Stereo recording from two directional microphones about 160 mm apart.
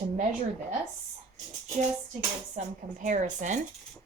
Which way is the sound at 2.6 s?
50° right (ahead or behind).